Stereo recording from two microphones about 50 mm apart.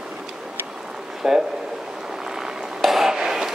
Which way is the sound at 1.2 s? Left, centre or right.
Centre.